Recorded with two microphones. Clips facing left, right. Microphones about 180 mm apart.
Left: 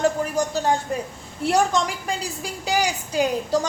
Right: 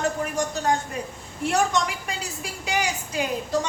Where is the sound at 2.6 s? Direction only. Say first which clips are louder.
Left 3 dB; 35° left (ahead or behind).